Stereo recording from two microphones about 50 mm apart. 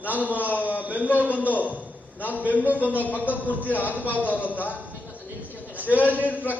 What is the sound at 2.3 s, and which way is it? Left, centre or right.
Speech, right.